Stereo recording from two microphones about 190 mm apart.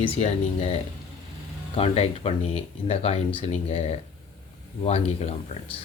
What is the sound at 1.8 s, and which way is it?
Speech, 30° left (ahead or behind).